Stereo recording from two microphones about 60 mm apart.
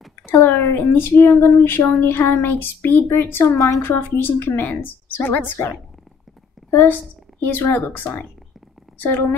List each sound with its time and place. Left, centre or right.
0.3 s a woman's voice: left
6.7 s a woman's voice: left